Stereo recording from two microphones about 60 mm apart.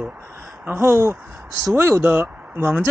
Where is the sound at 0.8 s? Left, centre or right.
Right.